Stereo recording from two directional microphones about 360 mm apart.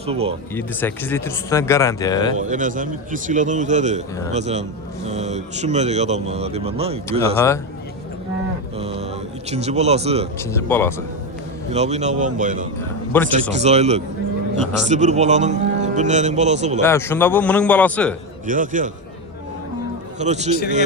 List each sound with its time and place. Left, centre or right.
0.0 s speech: centre
0.5 s speech: centre
2.3 s a man's voice: right
7.3 s speech: centre
8.8 s a sound: centre
10.5 s speech: centre
11.7 s a man's voice: centre
13.1 s a man's voice: centre
13.5 s a man's voice: centre
16.8 s a man's voice: centre
18.4 s a man's voice: right
20.1 s a man's voice: centre